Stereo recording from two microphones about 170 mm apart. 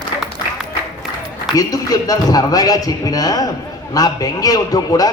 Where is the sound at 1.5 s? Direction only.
20° left (ahead or behind).